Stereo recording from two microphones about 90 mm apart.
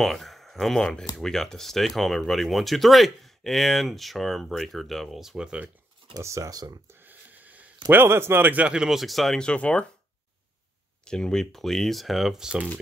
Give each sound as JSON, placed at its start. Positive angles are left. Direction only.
{"t": 0.0, "sound": "speech", "side_deg": 0}
{"t": 6.1, "sound": "speech", "side_deg": -35}
{"t": 6.9, "sound": "a sound", "side_deg": -20}
{"t": 7.9, "sound": "speech", "side_deg": -25}
{"t": 11.1, "sound": "speech", "side_deg": 10}